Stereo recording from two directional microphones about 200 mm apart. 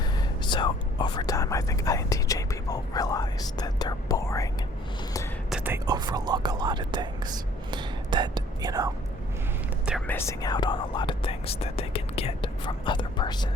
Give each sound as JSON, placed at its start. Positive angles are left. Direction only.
{"t": 0.0, "sound": "whispering", "side_deg": 20}
{"t": 5.5, "sound": "whispering", "side_deg": -5}
{"t": 10.1, "sound": "whispering", "side_deg": 15}